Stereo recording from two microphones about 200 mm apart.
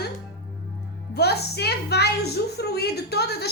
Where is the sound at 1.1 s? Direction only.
55° left (ahead or behind).